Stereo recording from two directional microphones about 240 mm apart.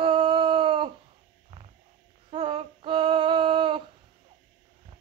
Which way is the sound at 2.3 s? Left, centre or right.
Right.